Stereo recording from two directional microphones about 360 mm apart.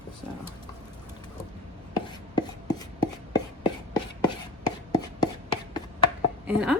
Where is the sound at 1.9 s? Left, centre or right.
Centre.